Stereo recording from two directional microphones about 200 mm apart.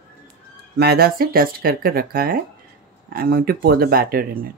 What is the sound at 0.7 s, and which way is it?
Speech, 50° right (ahead or behind).